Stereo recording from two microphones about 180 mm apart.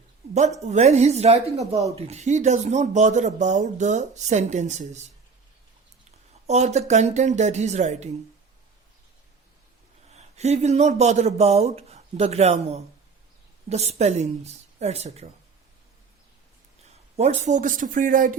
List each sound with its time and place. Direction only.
0.6 s speech: 40° right (ahead or behind)
6.5 s speech: 40° right (ahead or behind)
10.1 s speech: 40° right (ahead or behind)
17.4 s speech: 45° right (ahead or behind)